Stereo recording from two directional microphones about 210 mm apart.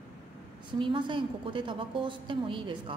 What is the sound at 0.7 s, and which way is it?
A woman's voice, 25° right (ahead or behind).